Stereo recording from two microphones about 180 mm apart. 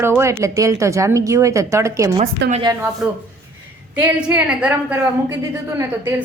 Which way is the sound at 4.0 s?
10° right (ahead or behind).